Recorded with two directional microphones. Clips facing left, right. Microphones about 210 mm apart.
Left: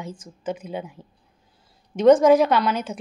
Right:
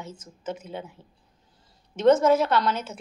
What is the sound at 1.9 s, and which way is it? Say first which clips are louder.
A woman's voice: left 4 dB; 15° left (ahead or behind).